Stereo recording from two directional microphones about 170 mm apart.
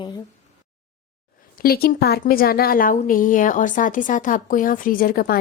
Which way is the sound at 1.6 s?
65° left (ahead or behind).